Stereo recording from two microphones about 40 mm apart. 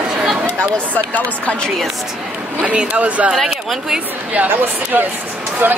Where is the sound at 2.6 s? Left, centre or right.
Right.